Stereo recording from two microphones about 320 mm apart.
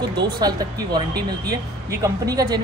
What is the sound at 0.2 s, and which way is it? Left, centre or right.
Speech, centre.